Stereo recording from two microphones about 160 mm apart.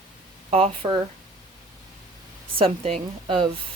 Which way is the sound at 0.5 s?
40° right (ahead or behind).